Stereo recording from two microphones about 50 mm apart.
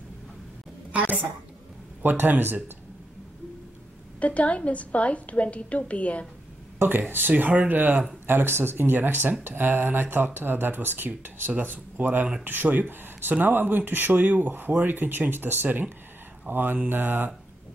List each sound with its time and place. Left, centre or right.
0.9 s a woman's voice: right
4.2 s a woman's voice: left
6.8 s speech: right
8.3 s speech: right